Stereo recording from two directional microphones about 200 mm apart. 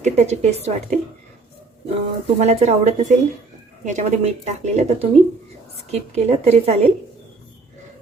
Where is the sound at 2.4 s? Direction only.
35° right (ahead or behind).